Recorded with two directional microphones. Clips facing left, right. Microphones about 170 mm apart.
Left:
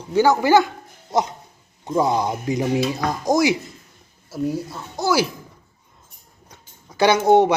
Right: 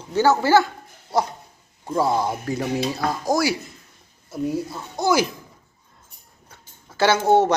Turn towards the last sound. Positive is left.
turn(degrees=15)  # may be behind; listen again after turning